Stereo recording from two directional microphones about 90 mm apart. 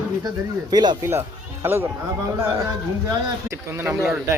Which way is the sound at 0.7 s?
50° right (ahead or behind).